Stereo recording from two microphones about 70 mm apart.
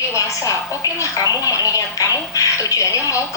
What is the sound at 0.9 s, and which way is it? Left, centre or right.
Speech, left.